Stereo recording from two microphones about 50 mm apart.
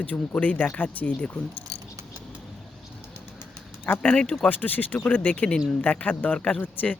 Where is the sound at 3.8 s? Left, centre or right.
Left.